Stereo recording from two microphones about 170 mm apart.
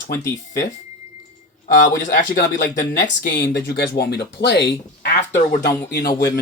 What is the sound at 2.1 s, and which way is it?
Speech, 50° left (ahead or behind).